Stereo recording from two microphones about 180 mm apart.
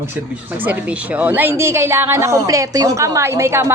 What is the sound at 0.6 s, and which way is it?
A woman's voice, 10° right (ahead or behind).